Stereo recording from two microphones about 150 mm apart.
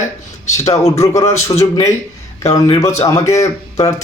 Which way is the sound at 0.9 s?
20° left (ahead or behind).